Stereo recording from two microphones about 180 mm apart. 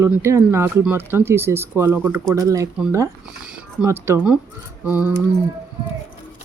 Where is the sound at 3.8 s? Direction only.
15° right (ahead or behind).